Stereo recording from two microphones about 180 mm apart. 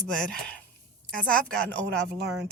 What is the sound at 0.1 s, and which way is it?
Speech, 5° left (ahead or behind).